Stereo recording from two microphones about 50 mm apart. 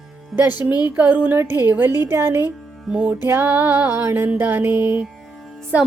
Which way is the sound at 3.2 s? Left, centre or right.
Right.